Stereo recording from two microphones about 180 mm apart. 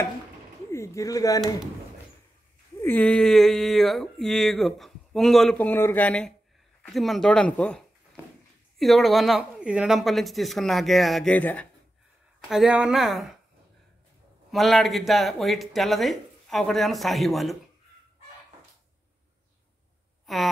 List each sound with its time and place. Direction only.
0.7 s pigeon: 15° left (ahead or behind)
2.8 s speech: 10° left (ahead or behind)
12.4 s speech: 5° right (ahead or behind)
14.5 s speech: centre (ahead or behind)
20.3 s speech: centre (ahead or behind)